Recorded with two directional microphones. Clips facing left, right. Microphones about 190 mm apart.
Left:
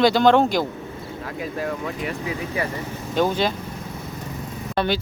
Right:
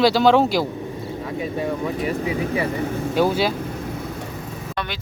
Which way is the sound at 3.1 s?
10° right (ahead or behind).